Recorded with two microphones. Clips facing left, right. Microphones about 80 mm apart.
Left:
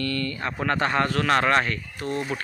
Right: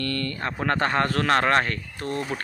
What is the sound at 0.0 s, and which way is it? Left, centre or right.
Speech, right.